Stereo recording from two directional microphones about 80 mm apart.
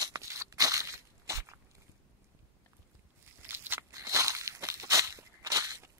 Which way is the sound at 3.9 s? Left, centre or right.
Right.